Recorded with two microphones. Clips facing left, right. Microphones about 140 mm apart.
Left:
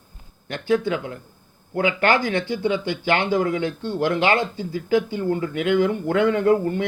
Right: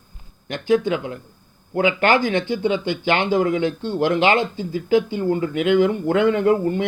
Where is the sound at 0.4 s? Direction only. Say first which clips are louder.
Right 3 dB; 15° right (ahead or behind).